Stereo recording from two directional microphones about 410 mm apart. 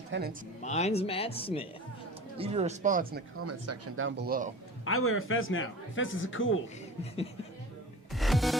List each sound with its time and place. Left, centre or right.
0.1 s speech: right
0.6 s speech: centre
2.4 s speech: centre
3.4 s speech: right
4.9 s a man's voice: left
8.1 s music: centre